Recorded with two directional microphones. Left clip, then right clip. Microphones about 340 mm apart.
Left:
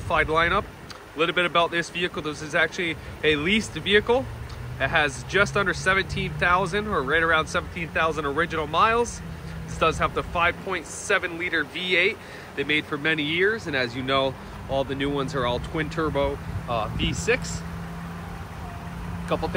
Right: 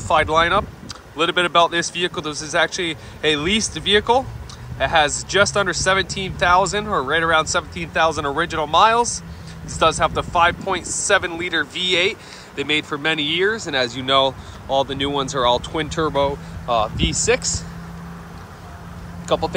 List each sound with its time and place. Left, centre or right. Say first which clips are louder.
0.1 s speech: right 5 dB; centre
19.2 s speech: right 7 dB; centre